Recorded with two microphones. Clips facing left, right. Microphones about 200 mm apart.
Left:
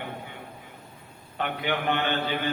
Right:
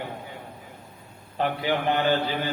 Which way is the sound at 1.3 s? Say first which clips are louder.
Right 4 dB; 35° right (ahead or behind).